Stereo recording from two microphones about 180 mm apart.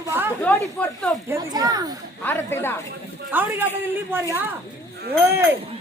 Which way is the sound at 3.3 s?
10° right (ahead or behind).